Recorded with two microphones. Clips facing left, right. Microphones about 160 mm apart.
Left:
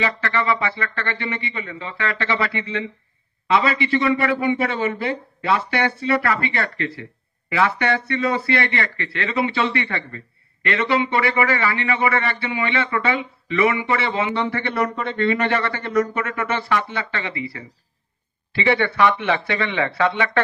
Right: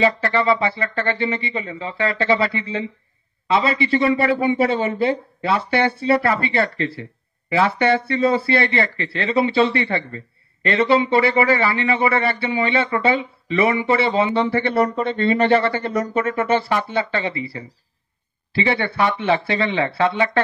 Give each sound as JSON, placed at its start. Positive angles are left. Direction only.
{"t": 0.0, "sound": "speech", "side_deg": -35}